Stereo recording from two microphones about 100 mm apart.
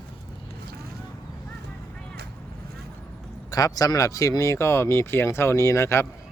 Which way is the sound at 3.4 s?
40° left (ahead or behind).